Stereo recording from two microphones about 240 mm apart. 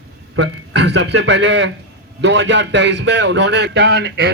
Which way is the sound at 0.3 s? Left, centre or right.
Right.